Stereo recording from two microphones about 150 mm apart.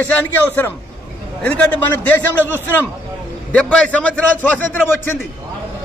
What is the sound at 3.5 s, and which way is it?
A man's voice, 10° left (ahead or behind).